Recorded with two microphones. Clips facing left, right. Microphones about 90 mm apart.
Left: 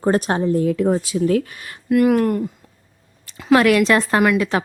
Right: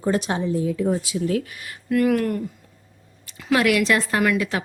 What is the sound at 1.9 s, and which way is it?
Speech, 20° left (ahead or behind).